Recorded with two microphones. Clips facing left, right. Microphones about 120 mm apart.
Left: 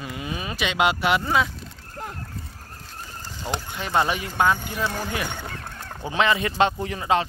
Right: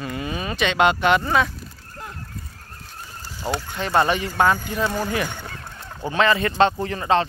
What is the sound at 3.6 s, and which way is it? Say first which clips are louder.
A man's voice: right 3 dB; 10° left (ahead or behind).